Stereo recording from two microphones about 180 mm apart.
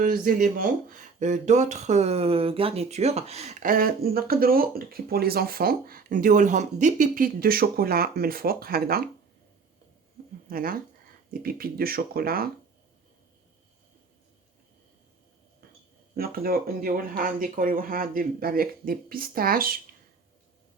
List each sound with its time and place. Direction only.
0.0 s speech: 50° right (ahead or behind)
10.5 s speech: 55° right (ahead or behind)
16.1 s speech: 55° right (ahead or behind)